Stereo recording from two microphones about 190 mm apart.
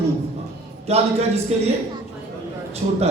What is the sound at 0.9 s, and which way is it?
Speech, 35° right (ahead or behind).